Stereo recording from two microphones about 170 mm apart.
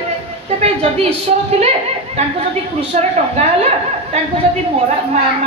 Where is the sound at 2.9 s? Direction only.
40° right (ahead or behind).